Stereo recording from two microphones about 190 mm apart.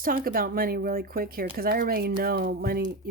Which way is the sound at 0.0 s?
50° right (ahead or behind).